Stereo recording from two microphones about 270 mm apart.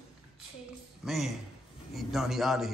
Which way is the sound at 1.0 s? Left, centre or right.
Centre.